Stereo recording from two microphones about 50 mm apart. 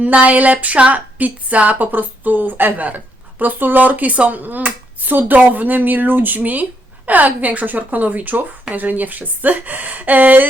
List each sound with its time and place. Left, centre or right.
0.0 s speech: right